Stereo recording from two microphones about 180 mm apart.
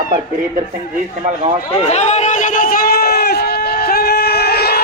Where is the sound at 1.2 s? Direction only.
40° right (ahead or behind).